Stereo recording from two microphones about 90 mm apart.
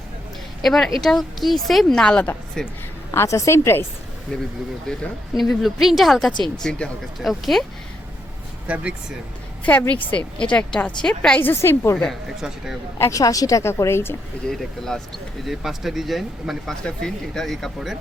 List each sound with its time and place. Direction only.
0.6 s a woman's voice: centre (ahead or behind)
3.1 s a woman's voice: 35° left (ahead or behind)
4.3 s a woman's voice: 10° left (ahead or behind)
8.6 s speech: 15° right (ahead or behind)
9.6 s a woman's voice: 20° left (ahead or behind)
11.4 s a woman's voice: 25° left (ahead or behind)
12.0 s speech: 5° right (ahead or behind)
13.0 s a woman's voice: 35° left (ahead or behind)
14.4 s speech: 5° left (ahead or behind)